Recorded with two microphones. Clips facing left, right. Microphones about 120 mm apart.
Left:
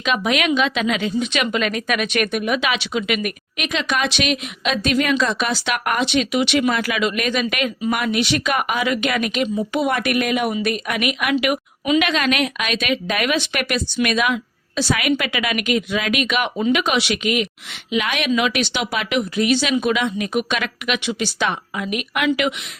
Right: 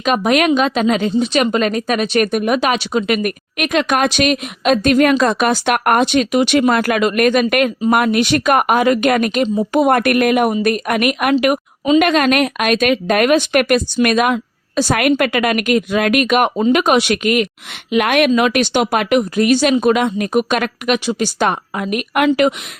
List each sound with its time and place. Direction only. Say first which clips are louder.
0.0 s speech: right 6 dB; 45° right (ahead or behind)